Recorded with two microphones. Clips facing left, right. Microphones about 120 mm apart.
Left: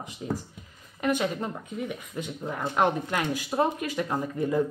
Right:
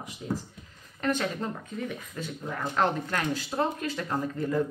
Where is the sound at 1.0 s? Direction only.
15° left (ahead or behind).